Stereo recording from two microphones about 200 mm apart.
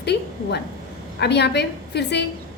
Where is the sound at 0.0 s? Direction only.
55° left (ahead or behind).